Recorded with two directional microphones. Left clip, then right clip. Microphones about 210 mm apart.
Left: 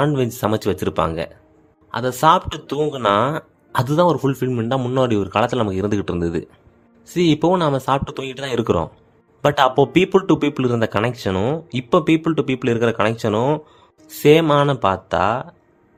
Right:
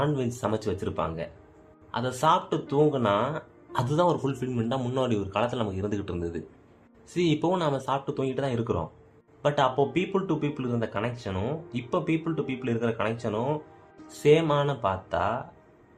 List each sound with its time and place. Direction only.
0.0 s speech: 45° left (ahead or behind)
7.6 s speech: 45° left (ahead or behind)